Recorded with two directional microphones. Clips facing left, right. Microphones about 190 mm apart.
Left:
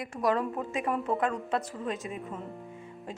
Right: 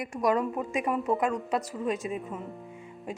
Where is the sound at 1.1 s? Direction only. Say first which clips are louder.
Right 4 dB; centre (ahead or behind).